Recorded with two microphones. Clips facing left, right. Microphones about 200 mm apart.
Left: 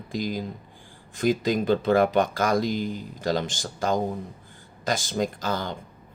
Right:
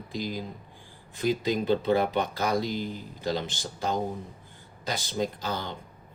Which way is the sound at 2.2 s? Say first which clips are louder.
Left 4 dB; 90° left.